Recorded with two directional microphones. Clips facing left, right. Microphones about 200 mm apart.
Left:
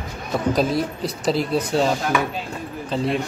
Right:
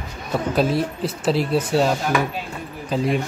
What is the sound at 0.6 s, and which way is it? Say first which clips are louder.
Speech: right 1 dB; 5° right (ahead or behind).